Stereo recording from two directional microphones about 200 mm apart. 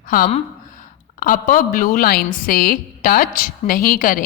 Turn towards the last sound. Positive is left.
turn(degrees=45)  # may be behind; listen again after turning